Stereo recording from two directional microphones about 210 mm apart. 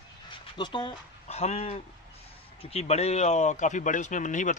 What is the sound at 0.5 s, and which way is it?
A man's voice, 20° left (ahead or behind).